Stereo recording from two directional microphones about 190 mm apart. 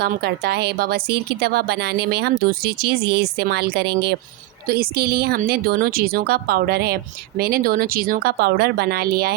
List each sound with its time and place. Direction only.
0.0 s a woman's voice: 55° right (ahead or behind)